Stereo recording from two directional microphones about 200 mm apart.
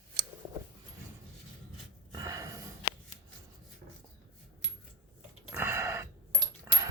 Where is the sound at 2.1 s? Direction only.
20° right (ahead or behind).